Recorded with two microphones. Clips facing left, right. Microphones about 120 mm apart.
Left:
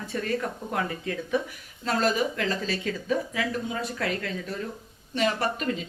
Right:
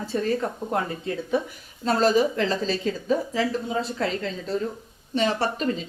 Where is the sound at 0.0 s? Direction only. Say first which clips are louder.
Right 4 dB; 30° right (ahead or behind).